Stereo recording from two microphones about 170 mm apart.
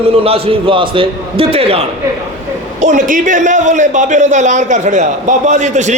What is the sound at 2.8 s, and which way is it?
A man's voice, 50° right (ahead or behind).